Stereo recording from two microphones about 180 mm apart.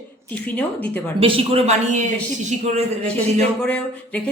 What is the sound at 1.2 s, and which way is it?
Speech, 30° right (ahead or behind).